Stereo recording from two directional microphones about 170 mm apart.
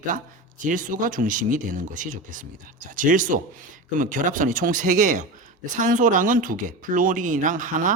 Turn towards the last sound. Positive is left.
turn(degrees=-50)  # may be behind; listen again after turning